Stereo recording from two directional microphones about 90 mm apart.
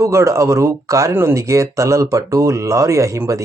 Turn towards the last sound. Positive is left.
turn(degrees=-35)  # may be behind; listen again after turning